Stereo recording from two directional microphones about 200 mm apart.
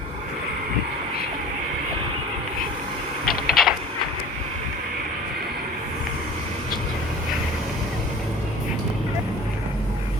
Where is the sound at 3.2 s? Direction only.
Centre (ahead or behind).